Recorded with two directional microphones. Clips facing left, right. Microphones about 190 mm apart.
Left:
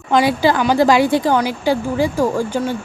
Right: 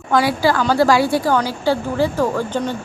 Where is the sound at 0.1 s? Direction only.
20° left (ahead or behind).